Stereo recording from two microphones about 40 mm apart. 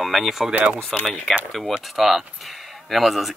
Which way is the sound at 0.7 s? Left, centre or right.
Centre.